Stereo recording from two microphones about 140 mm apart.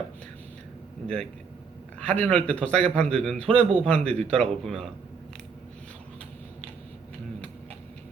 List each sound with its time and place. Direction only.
1.0 s a man's voice: 5° left (ahead or behind)